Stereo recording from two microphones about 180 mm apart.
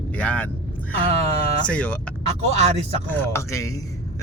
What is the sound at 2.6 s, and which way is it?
Speech, 35° right (ahead or behind).